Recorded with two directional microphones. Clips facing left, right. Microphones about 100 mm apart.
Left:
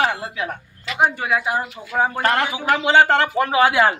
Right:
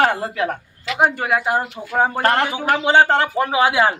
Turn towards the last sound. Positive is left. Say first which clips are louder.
# even
turn(degrees=-15)  # may be behind; listen again after turning